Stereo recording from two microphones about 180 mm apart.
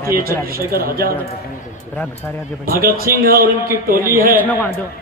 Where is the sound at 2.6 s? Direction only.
55° right (ahead or behind).